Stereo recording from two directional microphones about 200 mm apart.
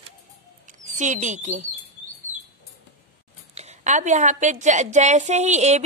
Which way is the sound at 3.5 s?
35° right (ahead or behind).